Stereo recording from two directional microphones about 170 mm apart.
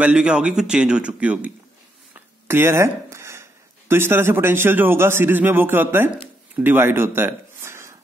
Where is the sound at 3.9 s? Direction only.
15° right (ahead or behind).